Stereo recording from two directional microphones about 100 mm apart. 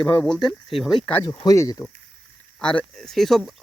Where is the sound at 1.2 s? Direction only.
50° left (ahead or behind).